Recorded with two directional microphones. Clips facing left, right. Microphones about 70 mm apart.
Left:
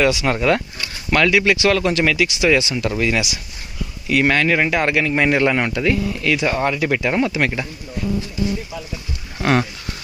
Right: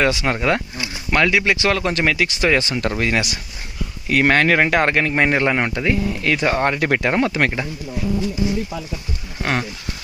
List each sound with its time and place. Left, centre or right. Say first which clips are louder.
0.0 s speech: left 1 dB; right
9.4 s speech: left 5 dB; centre